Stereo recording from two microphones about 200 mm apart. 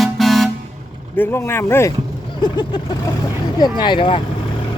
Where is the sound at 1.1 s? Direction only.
10° left (ahead or behind).